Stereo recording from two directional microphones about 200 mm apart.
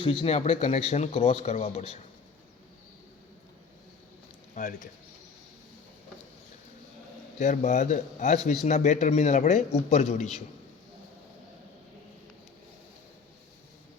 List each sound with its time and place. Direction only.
0.0 s speech: 25° left (ahead or behind)
4.5 s speech: 40° left (ahead or behind)
7.3 s speech: 35° left (ahead or behind)